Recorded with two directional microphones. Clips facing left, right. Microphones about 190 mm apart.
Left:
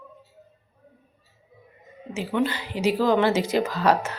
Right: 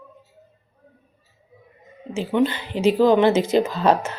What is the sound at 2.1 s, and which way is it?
Speech, 25° right (ahead or behind).